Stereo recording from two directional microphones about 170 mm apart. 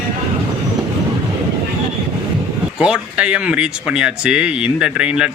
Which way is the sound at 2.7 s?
5° right (ahead or behind).